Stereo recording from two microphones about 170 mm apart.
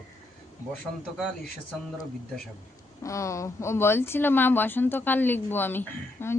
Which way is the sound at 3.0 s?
20° left (ahead or behind).